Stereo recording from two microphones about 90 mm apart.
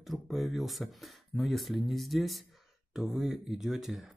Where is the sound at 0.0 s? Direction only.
Centre (ahead or behind).